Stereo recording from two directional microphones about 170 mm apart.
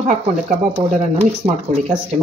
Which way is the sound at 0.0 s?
40° right (ahead or behind).